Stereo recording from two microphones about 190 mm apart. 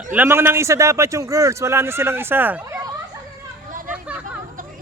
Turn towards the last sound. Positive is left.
turn(degrees=-5)  # may be behind; listen again after turning